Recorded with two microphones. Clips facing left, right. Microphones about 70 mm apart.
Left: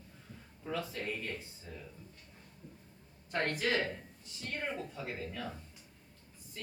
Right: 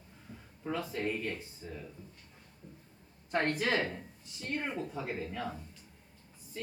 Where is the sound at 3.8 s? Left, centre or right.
Centre.